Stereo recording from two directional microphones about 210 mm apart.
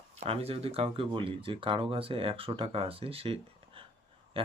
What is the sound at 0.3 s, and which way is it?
Speech, 30° right (ahead or behind).